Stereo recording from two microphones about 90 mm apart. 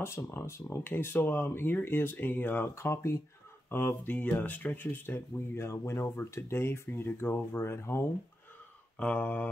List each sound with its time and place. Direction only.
0.0 s speech: 30° left (ahead or behind)
8.9 s mantra: 15° left (ahead or behind)